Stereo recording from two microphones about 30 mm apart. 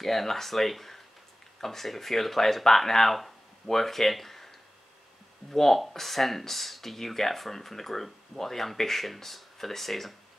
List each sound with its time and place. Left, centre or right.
0.0 s speech: centre
3.2 s a sound: centre
5.5 s speech: centre